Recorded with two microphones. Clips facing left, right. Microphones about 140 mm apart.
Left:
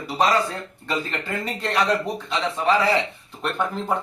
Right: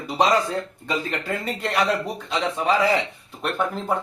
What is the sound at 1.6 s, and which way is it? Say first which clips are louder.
Speech: left 1 dB; 10° right (ahead or behind).